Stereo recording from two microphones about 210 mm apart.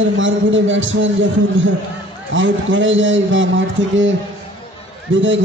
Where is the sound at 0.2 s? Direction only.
65° right (ahead or behind).